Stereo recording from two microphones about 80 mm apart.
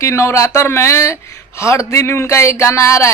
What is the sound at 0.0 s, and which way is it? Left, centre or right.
Speech, left.